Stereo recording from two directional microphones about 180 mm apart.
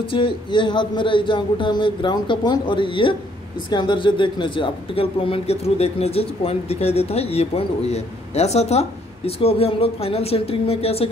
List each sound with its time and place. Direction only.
0.1 s speech: 30° left (ahead or behind)